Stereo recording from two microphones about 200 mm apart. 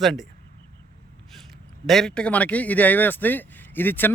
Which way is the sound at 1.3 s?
Centre (ahead or behind).